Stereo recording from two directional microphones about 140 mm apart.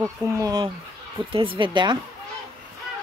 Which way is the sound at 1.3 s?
40° right (ahead or behind).